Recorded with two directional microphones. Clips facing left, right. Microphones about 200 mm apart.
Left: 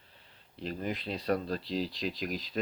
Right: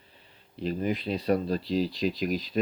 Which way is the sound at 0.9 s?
5° right (ahead or behind).